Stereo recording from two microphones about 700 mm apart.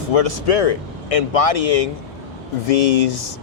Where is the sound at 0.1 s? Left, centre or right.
Left.